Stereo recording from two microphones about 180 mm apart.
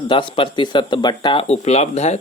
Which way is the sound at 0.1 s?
25° left (ahead or behind).